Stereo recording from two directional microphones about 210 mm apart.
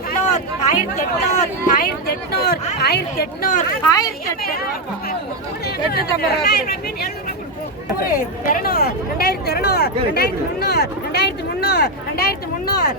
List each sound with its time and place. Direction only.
0.3 s speech: 35° left (ahead or behind)
3.9 s speech: 15° left (ahead or behind)
4.4 s speech: 45° left (ahead or behind)
5.6 s speech: 50° left (ahead or behind)